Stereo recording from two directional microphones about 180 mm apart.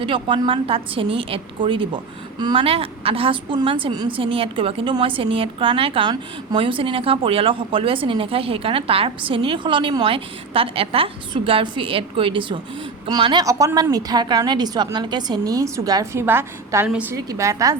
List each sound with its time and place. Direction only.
0.0 s a woman's voice: 30° right (ahead or behind)